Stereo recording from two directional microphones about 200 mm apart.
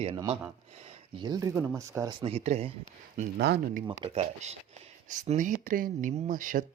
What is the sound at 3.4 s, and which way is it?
Speech, 55° right (ahead or behind).